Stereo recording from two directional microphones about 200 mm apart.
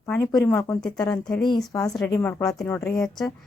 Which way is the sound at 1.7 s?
15° left (ahead or behind).